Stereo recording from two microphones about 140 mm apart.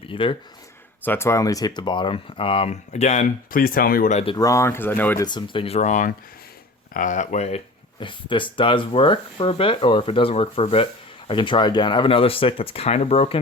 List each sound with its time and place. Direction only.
0.0 s speech: 40° left (ahead or behind)
1.0 s speech: 15° left (ahead or behind); by 3.3 s 55° left (ahead or behind)
3.5 s speech: 90° left
4.4 s speech: 20° left (ahead or behind)
5.2 s speech: 35° left (ahead or behind)